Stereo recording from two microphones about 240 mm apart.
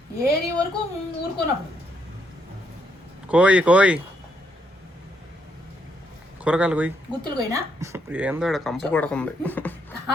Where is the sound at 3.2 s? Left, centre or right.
Centre.